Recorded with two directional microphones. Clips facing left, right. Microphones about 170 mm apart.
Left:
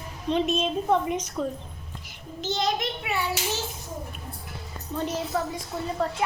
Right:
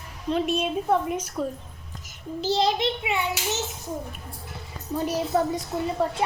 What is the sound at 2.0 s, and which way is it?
A child's voice, 40° right (ahead or behind).